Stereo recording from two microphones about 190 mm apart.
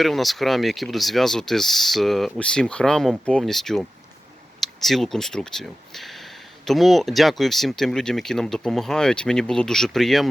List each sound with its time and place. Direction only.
0.0 s speech: centre (ahead or behind)